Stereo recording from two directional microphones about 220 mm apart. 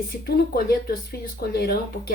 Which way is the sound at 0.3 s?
45° left (ahead or behind).